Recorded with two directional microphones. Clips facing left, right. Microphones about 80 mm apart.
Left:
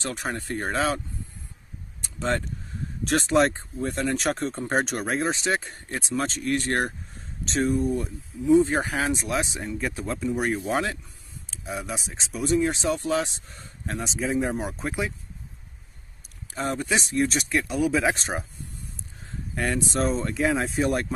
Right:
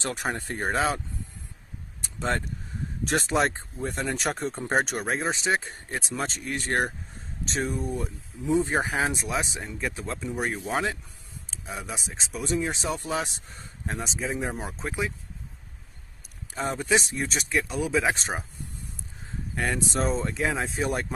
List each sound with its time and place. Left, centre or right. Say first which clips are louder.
0.0 s speech: even; right
3.2 s speech: left 4 dB; centre
12.9 s speech: left 4 dB; centre
13.2 s speech: left 3 dB; centre
16.5 s speech: right 1 dB; centre
19.5 s speech: left 2 dB; centre